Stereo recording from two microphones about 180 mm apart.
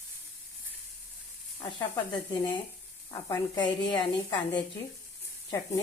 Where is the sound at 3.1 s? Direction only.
20° left (ahead or behind).